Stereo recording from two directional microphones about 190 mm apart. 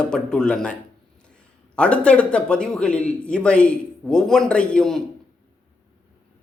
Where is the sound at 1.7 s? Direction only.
5° left (ahead or behind).